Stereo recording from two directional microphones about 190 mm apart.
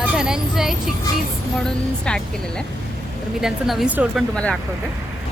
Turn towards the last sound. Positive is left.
turn(degrees=5)  # may be behind; listen again after turning